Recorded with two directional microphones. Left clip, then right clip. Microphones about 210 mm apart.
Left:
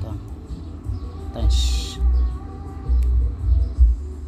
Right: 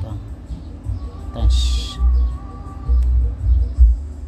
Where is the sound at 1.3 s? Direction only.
15° right (ahead or behind).